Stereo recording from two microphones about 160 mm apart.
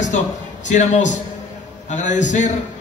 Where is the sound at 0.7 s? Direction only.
50° left (ahead or behind).